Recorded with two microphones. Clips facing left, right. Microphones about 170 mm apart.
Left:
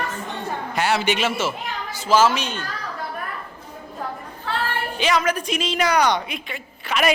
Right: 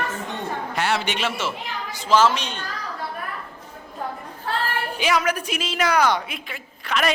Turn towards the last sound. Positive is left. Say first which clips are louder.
# left 2 dB
turn(degrees=5)  # may be behind; listen again after turning